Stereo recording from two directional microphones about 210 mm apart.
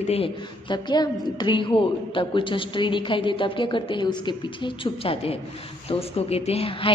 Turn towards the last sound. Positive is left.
turn(degrees=25)  # may be behind; listen again after turning